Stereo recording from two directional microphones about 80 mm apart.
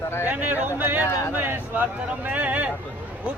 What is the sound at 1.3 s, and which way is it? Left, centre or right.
Speech, right.